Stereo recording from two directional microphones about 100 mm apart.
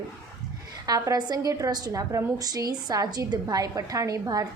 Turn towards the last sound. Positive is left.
turn(degrees=-40)  # may be behind; listen again after turning